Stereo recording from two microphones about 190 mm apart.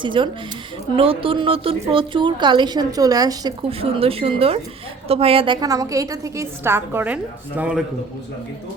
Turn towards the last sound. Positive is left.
turn(degrees=-5)  # may be behind; listen again after turning